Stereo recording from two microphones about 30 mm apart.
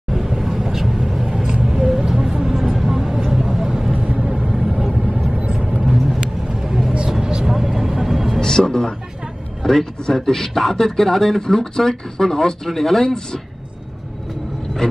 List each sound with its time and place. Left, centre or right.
0.1 s vehicle: centre
1.6 s a sound: centre
2.4 s vehicle: centre
4.3 s vehicle: right
4.6 s vehicle: centre
5.6 s vehicle: right
5.9 s vehicle: centre
6.5 s vehicle: centre
8.4 s music: centre
9.6 s a man's voice: centre
14.8 s a sound: left